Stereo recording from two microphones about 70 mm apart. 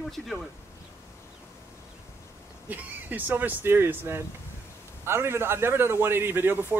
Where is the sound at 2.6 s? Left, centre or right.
Right.